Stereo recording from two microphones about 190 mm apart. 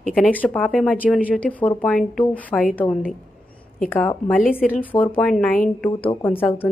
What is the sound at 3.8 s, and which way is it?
A woman's voice, 10° left (ahead or behind).